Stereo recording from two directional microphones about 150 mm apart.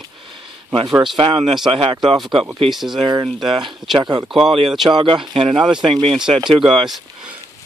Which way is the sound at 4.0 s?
30° right (ahead or behind).